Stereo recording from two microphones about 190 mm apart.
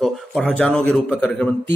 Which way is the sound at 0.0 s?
Centre (ahead or behind).